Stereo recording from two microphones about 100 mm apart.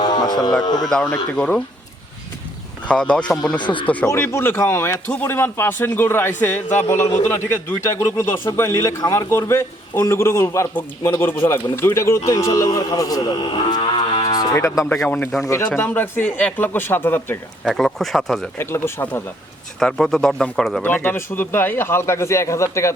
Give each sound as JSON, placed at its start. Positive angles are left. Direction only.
{"t": 0.0, "sound": "a sound", "side_deg": 50}
{"t": 0.9, "sound": "speech", "side_deg": 5}
{"t": 2.8, "sound": "speech", "side_deg": 10}
{"t": 3.6, "sound": "speech", "side_deg": 55}
{"t": 4.0, "sound": "a man's voice", "side_deg": 25}
{"t": 13.5, "sound": "cattle", "side_deg": 50}
{"t": 14.5, "sound": "a man's voice", "side_deg": 30}
{"t": 15.0, "sound": "a man's voice", "side_deg": 15}
{"t": 17.7, "sound": "speech", "side_deg": 5}
{"t": 18.5, "sound": "a man's voice", "side_deg": 25}
{"t": 19.8, "sound": "speech", "side_deg": 5}
{"t": 20.8, "sound": "a man's voice", "side_deg": 20}